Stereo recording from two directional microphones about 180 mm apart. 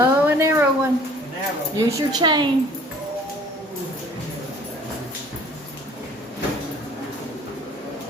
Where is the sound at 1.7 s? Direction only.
20° right (ahead or behind).